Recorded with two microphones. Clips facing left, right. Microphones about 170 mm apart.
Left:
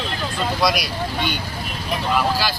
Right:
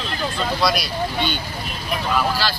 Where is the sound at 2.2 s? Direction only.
10° left (ahead or behind).